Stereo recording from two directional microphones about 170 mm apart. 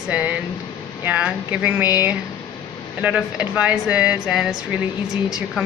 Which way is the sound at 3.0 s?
5° right (ahead or behind).